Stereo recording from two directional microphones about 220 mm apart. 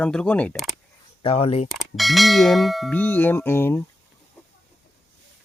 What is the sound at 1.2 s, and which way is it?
Speech, 25° left (ahead or behind).